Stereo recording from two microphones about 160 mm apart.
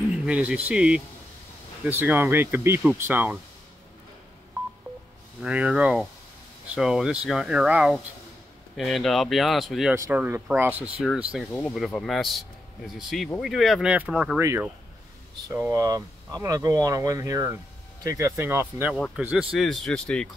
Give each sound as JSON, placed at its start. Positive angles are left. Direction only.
{"t": 0.1, "sound": "speech", "side_deg": -5}
{"t": 5.4, "sound": "speech", "side_deg": -5}
{"t": 9.9, "sound": "speech", "side_deg": -15}
{"t": 14.4, "sound": "speech", "side_deg": -20}